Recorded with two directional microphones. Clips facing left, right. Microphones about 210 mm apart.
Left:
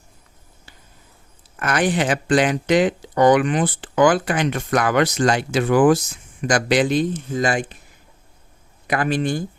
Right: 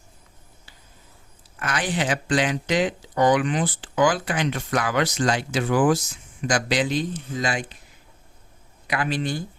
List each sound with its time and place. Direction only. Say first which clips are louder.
1.5 s speech: left 6 dB; 55° left (ahead or behind)
8.9 s speech: left 5 dB; 50° left (ahead or behind)